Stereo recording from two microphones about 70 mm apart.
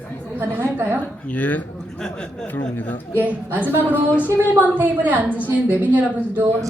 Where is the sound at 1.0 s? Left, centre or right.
Left.